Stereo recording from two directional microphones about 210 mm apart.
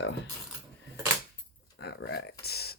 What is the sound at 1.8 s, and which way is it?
Speech, 55° left (ahead or behind).